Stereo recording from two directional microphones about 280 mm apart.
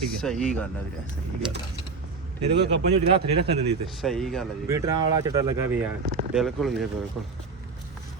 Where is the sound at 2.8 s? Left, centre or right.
Right.